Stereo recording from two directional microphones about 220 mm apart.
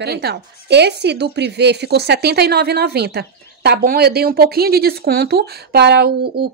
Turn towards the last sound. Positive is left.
turn(degrees=-45)  # may be behind; listen again after turning